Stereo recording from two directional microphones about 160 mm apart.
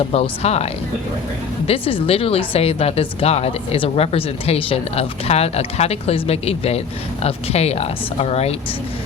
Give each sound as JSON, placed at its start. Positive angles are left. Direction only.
{"t": 0.1, "sound": "speech", "side_deg": 40}